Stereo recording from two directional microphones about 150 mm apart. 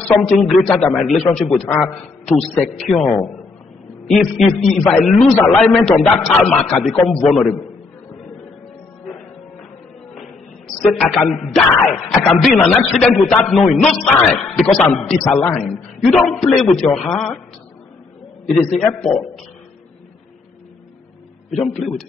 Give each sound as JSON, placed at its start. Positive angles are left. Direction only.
{"t": 0.1, "sound": "a man's voice", "side_deg": 0}
{"t": 1.7, "sound": "a man's voice", "side_deg": 15}
{"t": 2.5, "sound": "a man's voice", "side_deg": 5}
{"t": 4.1, "sound": "a man's voice", "side_deg": 0}
{"t": 10.8, "sound": "a man's voice", "side_deg": 5}
{"t": 18.8, "sound": "a man's voice", "side_deg": 5}
{"t": 21.5, "sound": "a man's voice", "side_deg": 0}